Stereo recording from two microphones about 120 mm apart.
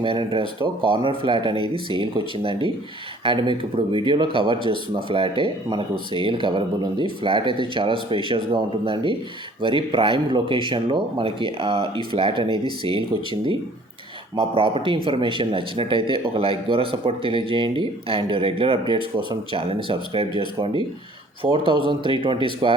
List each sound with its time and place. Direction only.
0.0 s speech: 45° right (ahead or behind)
21.4 s speech: 45° right (ahead or behind)